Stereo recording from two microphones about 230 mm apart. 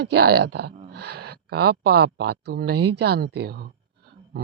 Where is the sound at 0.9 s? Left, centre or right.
Right.